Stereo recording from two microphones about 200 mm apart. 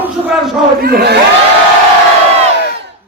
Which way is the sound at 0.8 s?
50° right (ahead or behind).